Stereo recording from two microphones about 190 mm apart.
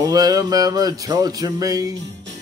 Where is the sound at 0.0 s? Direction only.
20° right (ahead or behind).